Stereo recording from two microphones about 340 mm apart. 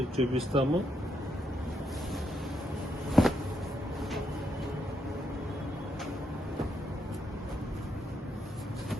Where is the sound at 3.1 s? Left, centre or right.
Centre.